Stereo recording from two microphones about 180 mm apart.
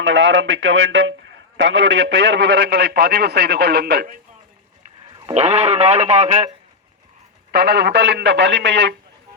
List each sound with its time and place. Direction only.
0.0 s a man's voice: 90° right; by 4.0 s 65° right (ahead or behind)
5.3 s speech: 35° right (ahead or behind)
7.5 s a man's voice: 60° right (ahead or behind)